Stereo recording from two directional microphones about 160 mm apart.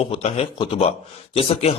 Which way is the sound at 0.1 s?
40° left (ahead or behind).